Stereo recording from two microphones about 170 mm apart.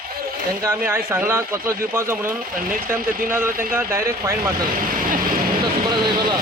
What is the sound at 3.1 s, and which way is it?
Speech, 55° right (ahead or behind).